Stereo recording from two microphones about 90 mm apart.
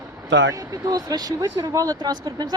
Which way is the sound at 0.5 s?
40° right (ahead or behind).